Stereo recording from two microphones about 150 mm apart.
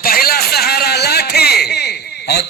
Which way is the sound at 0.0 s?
85° left.